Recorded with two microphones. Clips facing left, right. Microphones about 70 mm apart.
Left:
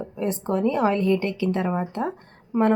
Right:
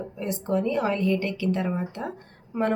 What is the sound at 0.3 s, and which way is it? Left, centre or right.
Speech, left.